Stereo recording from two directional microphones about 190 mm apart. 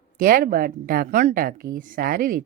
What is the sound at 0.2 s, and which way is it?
Speech, 45° right (ahead or behind).